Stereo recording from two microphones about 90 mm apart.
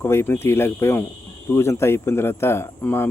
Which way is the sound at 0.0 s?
25° left (ahead or behind).